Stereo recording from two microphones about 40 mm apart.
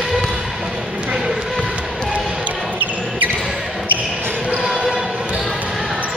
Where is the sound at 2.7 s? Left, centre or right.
Right.